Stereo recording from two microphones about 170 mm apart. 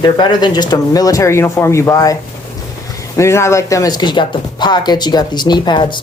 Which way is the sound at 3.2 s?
15° left (ahead or behind).